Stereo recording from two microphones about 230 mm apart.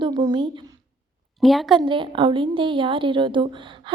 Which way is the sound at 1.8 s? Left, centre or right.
Right.